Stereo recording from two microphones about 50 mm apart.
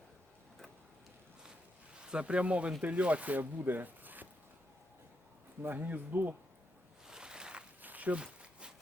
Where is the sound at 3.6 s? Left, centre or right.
Right.